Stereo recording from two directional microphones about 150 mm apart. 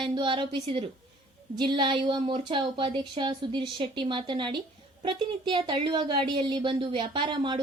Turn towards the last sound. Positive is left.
turn(degrees=-30)  # may be behind; listen again after turning